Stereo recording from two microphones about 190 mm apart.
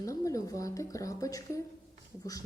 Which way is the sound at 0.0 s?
15° left (ahead or behind).